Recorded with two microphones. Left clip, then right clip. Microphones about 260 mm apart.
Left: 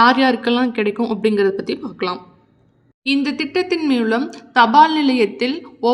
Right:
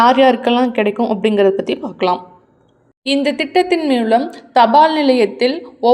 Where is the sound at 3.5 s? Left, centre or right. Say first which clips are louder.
Right 4 dB; left.